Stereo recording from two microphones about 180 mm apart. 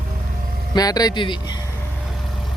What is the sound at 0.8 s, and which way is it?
Speech, 20° left (ahead or behind).